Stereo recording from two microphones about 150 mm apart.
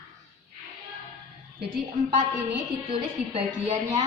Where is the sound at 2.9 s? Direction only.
45° right (ahead or behind).